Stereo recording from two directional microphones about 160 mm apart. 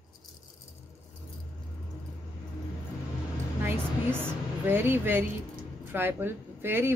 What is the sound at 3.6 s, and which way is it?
Music, 15° right (ahead or behind).